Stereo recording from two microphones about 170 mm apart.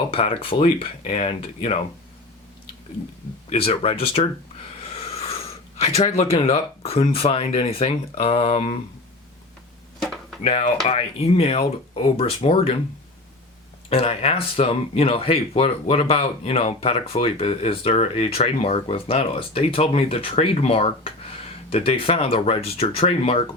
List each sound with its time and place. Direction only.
0.1 s speech: 35° left (ahead or behind)
3.5 s speech: 35° left (ahead or behind)
4.8 s a sound: 35° left (ahead or behind)
6.1 s speech: 35° left (ahead or behind)
10.4 s speech: 35° left (ahead or behind)
13.9 s speech: 35° left (ahead or behind)